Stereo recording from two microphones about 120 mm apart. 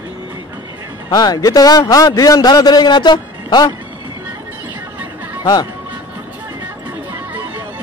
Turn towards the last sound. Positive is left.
turn(degrees=-15)  # may be behind; listen again after turning